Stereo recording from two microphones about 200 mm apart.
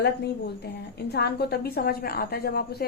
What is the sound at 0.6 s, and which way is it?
A woman's voice, 55° left (ahead or behind).